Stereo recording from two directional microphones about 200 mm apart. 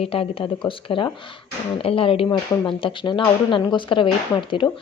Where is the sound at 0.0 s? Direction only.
30° left (ahead or behind).